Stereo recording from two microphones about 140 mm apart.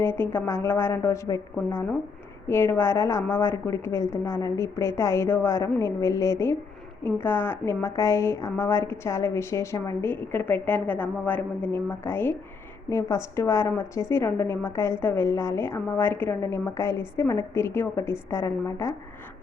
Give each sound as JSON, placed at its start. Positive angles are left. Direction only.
{"t": 0.0, "sound": "a woman's voice", "side_deg": 15}
{"t": 1.5, "sound": "a woman's voice", "side_deg": 10}